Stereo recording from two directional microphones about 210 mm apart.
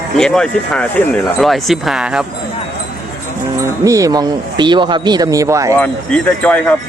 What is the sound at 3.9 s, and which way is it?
Speech, 15° right (ahead or behind).